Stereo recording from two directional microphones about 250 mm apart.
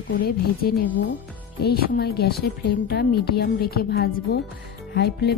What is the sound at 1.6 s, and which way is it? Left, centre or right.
Speech, left.